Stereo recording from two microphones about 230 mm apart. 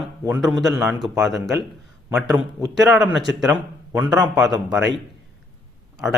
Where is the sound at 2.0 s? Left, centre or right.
Centre.